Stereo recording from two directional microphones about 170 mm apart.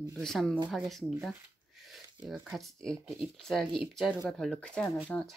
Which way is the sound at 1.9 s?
5° right (ahead or behind).